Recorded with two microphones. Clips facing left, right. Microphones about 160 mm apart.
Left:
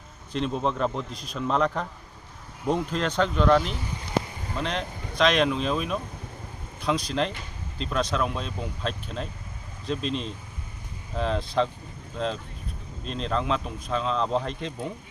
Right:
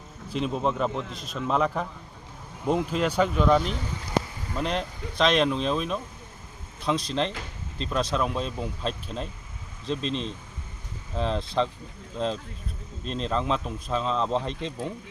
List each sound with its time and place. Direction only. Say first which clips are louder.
0.3 s speech: even; 5° right (ahead or behind)
13.1 s speech: even; centre (ahead or behind)